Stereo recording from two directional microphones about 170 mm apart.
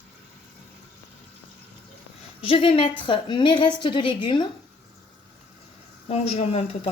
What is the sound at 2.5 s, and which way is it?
A woman's voice, 30° left (ahead or behind).